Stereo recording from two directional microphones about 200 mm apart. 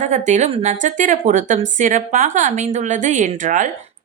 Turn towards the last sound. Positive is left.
turn(degrees=-40)  # may be behind; listen again after turning